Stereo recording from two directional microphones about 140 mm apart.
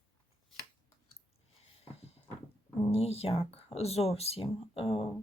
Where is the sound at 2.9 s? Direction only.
45° left (ahead or behind).